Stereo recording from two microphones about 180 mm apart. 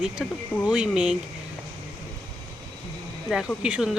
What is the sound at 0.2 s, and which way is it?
Speech, 5° left (ahead or behind).